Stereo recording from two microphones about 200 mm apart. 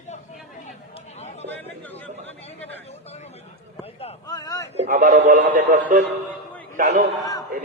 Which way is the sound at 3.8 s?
30° left (ahead or behind).